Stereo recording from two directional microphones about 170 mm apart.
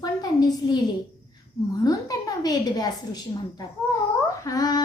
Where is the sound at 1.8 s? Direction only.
20° left (ahead or behind).